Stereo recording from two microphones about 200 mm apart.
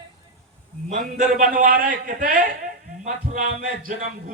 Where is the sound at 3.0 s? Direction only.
35° right (ahead or behind).